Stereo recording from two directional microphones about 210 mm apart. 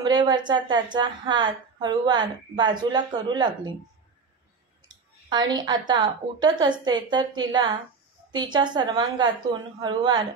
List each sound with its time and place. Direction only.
0.0 s a woman's voice: 20° right (ahead or behind)
4.8 s a woman's voice: 20° right (ahead or behind)